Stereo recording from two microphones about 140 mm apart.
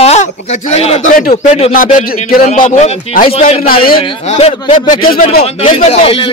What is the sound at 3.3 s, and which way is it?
A man's voice, 45° left (ahead or behind).